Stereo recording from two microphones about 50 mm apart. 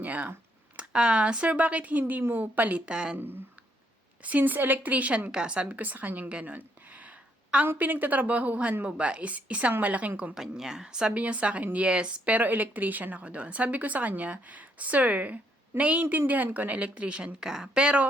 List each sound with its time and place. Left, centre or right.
0.0 s a woman's voice: right
4.2 s speech: right
5.3 s a woman's voice: centre
5.6 s a woman's voice: right
10.3 s a woman's voice: centre
11.1 s a woman's voice: right
17.4 s a woman's voice: centre